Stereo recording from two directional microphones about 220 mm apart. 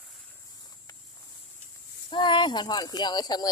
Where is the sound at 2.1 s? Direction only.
20° left (ahead or behind).